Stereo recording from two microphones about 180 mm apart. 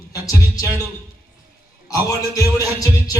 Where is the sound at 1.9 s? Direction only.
20° left (ahead or behind).